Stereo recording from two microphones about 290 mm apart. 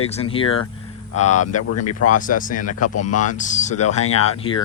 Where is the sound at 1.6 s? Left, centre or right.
Left.